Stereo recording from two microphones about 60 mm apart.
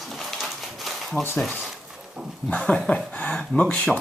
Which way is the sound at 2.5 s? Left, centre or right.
Centre.